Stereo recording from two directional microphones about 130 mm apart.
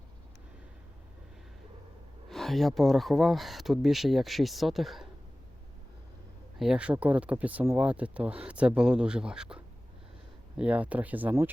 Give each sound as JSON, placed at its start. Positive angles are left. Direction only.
{"t": 2.3, "sound": "speech", "side_deg": 0}
{"t": 6.6, "sound": "speech", "side_deg": -5}
{"t": 10.6, "sound": "speech", "side_deg": -10}